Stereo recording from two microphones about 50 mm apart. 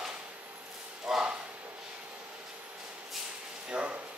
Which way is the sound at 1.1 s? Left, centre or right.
Centre.